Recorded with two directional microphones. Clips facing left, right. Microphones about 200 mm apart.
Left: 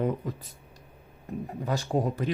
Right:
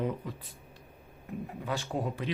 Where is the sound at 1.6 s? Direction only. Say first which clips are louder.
Left 6 dB; 40° left (ahead or behind).